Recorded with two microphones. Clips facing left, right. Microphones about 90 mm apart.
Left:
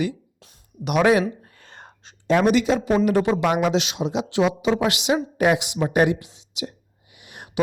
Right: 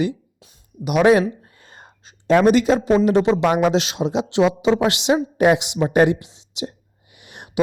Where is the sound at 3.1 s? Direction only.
20° right (ahead or behind).